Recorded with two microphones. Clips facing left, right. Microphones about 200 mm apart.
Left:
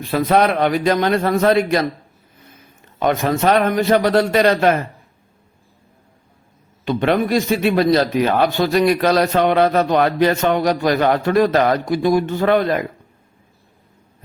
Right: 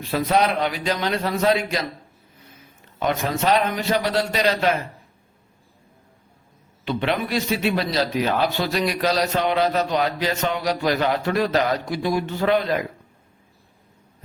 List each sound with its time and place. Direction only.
0.1 s a man's voice: 55° left (ahead or behind)
3.0 s a man's voice: 50° left (ahead or behind)
6.8 s a man's voice: 50° left (ahead or behind)